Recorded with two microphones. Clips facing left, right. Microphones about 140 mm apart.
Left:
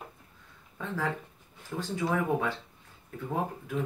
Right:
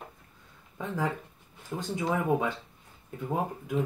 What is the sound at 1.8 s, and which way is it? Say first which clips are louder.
Speech: even; 15° right (ahead or behind).